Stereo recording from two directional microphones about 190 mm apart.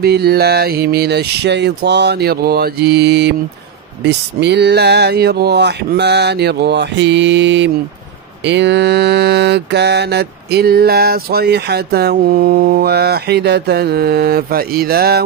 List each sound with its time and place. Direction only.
0.0 s mantra: 55° right (ahead or behind)